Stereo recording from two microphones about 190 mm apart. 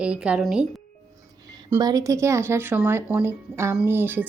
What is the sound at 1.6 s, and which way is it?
Speech, 15° right (ahead or behind).